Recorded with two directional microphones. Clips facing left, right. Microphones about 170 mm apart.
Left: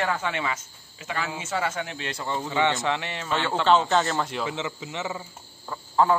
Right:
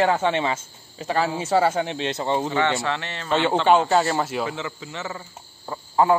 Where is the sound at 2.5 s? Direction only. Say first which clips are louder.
Right 1 dB; 15° left (ahead or behind).